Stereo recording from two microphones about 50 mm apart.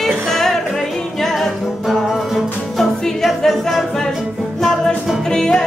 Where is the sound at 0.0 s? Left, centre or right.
Centre.